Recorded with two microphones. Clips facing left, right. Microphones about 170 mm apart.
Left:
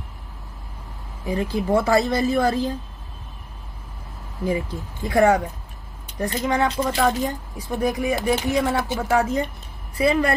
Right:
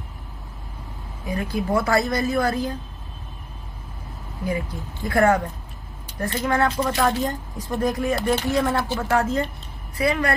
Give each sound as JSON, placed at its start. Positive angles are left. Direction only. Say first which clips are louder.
{"t": 1.3, "sound": "a woman's voice", "louder": "left 2 dB", "side_deg": 25}
{"t": 4.5, "sound": "speech", "louder": "left 2 dB", "side_deg": 20}
{"t": 7.0, "sound": "a woman's voice", "louder": "left 2 dB", "side_deg": 0}
{"t": 7.7, "sound": "speech", "louder": "even", "side_deg": 15}
{"t": 9.9, "sound": "a woman's voice", "louder": "left 3 dB", "side_deg": 30}